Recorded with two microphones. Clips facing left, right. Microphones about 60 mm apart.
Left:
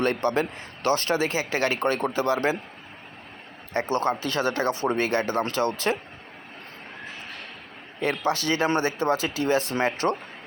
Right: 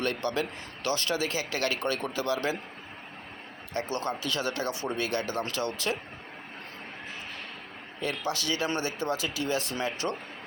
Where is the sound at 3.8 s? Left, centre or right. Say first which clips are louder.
Left 7 dB; left.